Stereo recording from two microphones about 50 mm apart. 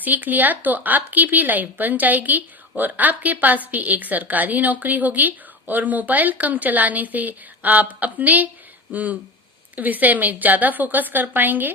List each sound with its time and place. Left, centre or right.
0.0 s speech: right